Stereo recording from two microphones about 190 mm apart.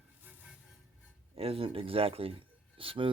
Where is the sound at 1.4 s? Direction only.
30° right (ahead or behind).